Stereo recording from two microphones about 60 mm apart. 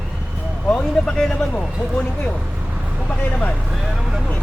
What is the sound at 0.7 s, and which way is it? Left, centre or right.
Speech, centre.